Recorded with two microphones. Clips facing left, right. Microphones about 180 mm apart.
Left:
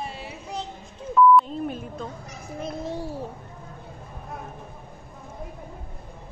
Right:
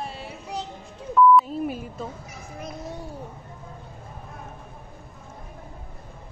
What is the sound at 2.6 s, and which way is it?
Speech, 30° left (ahead or behind).